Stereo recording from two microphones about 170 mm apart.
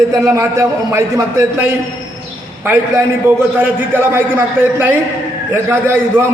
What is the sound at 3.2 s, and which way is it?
A man's voice, 15° right (ahead or behind).